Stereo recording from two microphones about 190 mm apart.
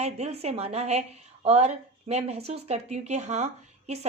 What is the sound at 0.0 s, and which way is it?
Speech, 35° right (ahead or behind).